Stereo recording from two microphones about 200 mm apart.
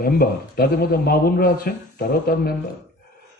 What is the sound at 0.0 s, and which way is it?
A man's voice, 50° left (ahead or behind).